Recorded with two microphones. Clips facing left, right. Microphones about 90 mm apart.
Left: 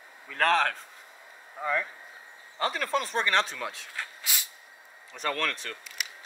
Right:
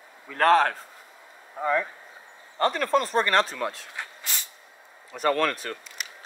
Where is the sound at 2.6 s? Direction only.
Centre (ahead or behind).